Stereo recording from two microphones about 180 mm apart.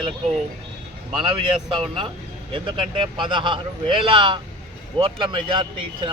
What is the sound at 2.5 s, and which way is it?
Speech, 30° right (ahead or behind).